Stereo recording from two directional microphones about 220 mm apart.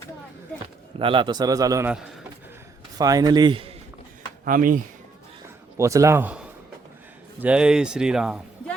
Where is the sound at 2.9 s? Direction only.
15° right (ahead or behind).